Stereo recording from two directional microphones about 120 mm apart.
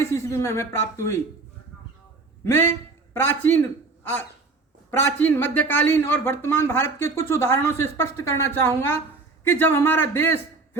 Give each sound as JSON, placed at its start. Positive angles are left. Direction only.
{"t": 0.0, "sound": "a man's voice", "side_deg": 25}
{"t": 2.4, "sound": "a man's voice", "side_deg": 20}
{"t": 4.9, "sound": "a man's voice", "side_deg": 20}